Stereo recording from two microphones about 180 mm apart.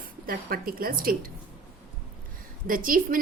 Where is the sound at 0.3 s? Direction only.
55° right (ahead or behind).